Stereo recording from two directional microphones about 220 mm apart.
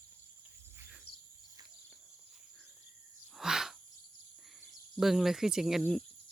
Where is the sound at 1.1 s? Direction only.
90° left.